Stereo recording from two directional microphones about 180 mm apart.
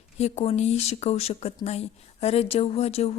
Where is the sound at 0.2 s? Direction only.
35° left (ahead or behind).